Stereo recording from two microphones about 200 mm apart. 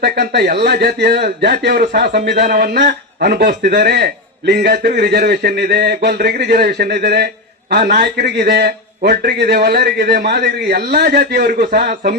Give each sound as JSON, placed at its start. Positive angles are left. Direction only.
{"t": 0.0, "sound": "a man's voice", "side_deg": -55}